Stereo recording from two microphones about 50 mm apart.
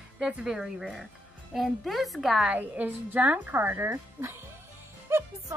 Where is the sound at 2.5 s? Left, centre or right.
Right.